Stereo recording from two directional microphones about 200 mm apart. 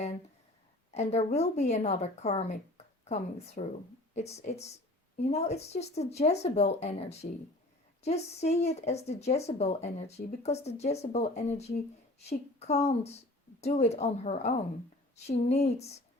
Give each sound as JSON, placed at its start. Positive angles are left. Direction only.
{"t": 0.9, "sound": "a woman's voice", "side_deg": 35}